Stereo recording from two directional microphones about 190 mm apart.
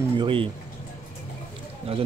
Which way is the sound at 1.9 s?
30° right (ahead or behind).